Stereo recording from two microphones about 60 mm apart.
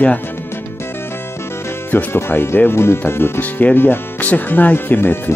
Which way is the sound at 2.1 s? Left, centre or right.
Left.